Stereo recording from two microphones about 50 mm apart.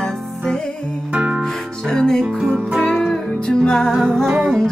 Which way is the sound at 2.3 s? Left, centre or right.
Centre.